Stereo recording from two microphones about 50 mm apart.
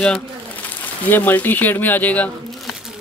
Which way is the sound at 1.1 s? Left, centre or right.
Left.